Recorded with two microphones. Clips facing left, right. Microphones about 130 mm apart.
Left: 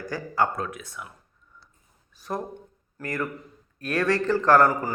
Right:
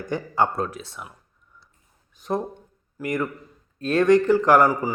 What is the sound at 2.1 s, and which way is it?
A man's voice, 20° right (ahead or behind).